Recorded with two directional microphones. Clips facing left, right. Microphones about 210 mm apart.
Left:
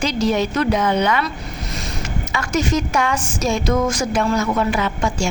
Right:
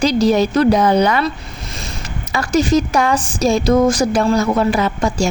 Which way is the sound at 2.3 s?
35° right (ahead or behind).